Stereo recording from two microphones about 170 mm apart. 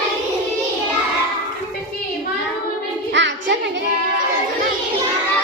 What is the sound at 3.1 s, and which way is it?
Music, 90° right.